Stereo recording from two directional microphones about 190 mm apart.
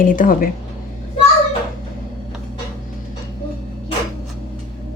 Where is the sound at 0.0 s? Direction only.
45° left (ahead or behind).